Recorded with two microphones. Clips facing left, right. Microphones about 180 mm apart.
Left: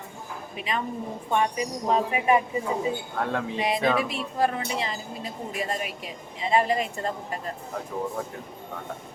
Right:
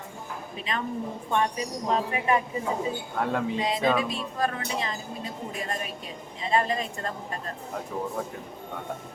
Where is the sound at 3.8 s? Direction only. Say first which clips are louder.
Even; 15° right (ahead or behind).